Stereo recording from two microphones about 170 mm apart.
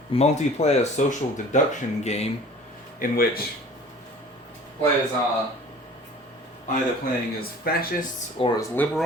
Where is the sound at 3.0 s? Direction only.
60° left (ahead or behind).